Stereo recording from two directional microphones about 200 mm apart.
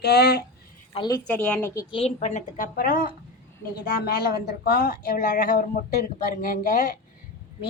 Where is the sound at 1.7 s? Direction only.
20° left (ahead or behind); by 7.0 s 40° left (ahead or behind).